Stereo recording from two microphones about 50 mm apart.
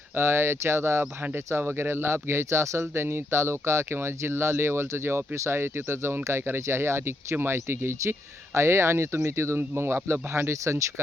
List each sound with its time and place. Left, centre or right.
0.2 s speech: right
1.6 s speech: right
2.9 s speech: right
8.5 s speech: right
9.6 s speech: right